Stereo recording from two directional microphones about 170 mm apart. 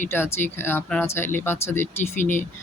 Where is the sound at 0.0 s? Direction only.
15° left (ahead or behind).